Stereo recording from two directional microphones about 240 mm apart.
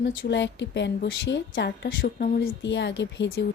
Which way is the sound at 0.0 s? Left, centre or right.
Left.